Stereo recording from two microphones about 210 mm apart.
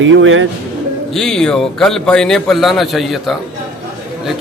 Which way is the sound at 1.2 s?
5° left (ahead or behind).